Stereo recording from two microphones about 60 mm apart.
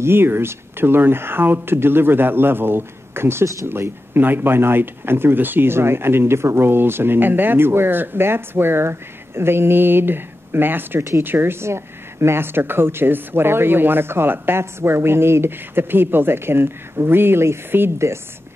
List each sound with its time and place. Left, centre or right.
0.0 s speech: right
11.0 s speech: right
11.2 s speech: right